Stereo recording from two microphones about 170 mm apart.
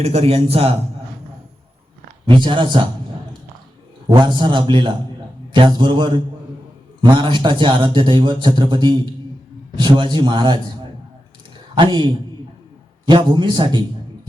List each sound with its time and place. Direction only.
0.0 s a man's voice: 40° right (ahead or behind)
2.2 s a man's voice: 30° right (ahead or behind)
4.1 s a man's voice: 25° right (ahead or behind)
11.7 s a man's voice: 25° right (ahead or behind)